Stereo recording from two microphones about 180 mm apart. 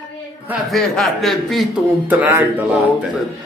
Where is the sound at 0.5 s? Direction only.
Centre (ahead or behind).